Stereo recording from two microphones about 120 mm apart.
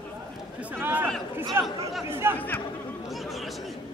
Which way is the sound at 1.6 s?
20° right (ahead or behind).